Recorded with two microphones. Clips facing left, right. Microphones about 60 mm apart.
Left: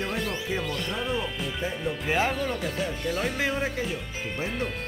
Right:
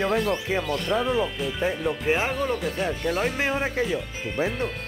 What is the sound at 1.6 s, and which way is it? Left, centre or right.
Speech, right.